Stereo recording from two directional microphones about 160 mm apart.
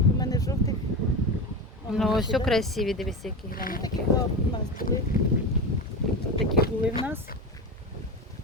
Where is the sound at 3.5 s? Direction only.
65° left (ahead or behind).